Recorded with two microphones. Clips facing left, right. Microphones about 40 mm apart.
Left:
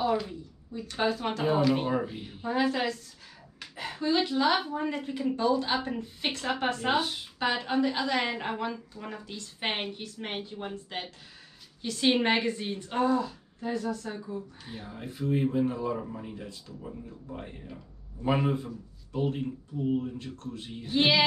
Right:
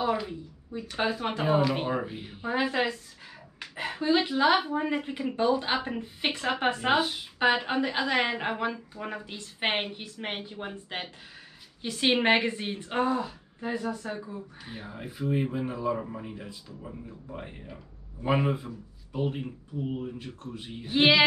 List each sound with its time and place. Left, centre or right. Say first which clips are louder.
0.0 s a woman's voice: even; centre